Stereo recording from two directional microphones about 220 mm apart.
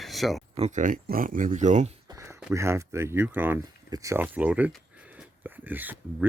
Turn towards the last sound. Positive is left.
turn(degrees=-10)  # may be behind; listen again after turning